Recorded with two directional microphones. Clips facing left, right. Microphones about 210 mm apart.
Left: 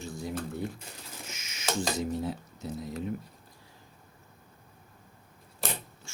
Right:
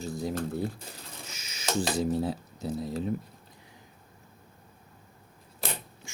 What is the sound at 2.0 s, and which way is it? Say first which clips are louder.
Speech: right 4 dB; 35° right (ahead or behind).